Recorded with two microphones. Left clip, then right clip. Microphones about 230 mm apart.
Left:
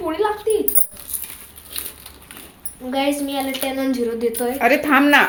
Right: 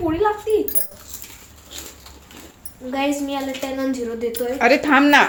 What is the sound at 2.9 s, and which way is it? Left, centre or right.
Speech, left.